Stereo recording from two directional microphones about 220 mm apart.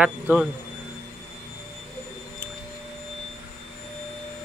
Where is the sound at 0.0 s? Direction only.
5° right (ahead or behind).